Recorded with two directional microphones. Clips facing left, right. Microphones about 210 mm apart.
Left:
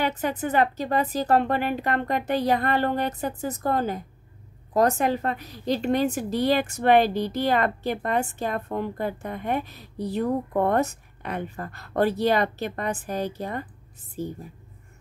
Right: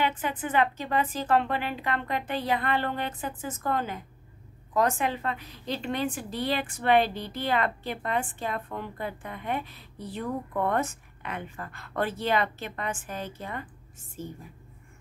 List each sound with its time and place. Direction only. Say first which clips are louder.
0.0 s a woman's voice: left 3 dB; 40° left (ahead or behind)